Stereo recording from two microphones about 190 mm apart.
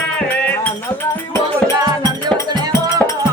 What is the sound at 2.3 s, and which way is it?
Music, 15° left (ahead or behind).